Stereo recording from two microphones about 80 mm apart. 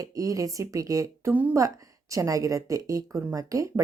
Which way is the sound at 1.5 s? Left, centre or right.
Right.